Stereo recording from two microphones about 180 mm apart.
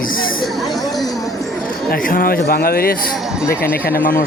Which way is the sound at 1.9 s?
50° left (ahead or behind).